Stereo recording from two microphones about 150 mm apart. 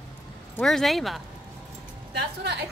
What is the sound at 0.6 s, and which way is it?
Speech, centre (ahead or behind).